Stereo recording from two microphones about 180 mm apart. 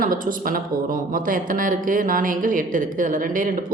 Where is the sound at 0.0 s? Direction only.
50° right (ahead or behind).